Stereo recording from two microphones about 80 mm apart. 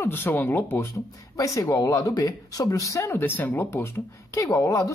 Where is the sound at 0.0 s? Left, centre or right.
Left.